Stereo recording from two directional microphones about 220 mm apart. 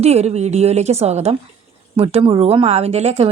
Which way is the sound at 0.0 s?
30° right (ahead or behind).